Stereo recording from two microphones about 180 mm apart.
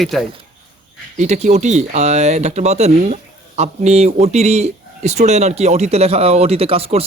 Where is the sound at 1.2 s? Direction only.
40° right (ahead or behind).